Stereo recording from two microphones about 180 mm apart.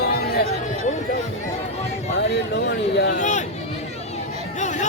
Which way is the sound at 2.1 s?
70° left (ahead or behind).